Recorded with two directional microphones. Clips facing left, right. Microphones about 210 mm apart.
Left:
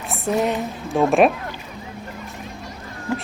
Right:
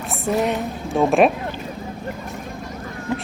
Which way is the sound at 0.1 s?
Centre (ahead or behind).